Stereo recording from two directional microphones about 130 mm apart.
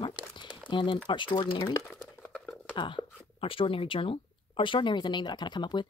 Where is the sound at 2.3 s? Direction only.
10° left (ahead or behind).